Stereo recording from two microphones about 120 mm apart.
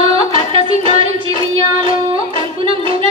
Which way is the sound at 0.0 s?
55° right (ahead or behind).